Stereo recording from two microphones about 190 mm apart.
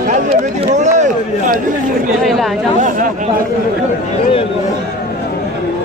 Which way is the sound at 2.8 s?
40° right (ahead or behind).